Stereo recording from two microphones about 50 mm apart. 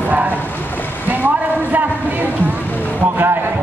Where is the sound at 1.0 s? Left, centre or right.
Right.